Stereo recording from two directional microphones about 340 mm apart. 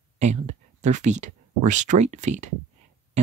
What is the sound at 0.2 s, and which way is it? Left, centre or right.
Speech, centre.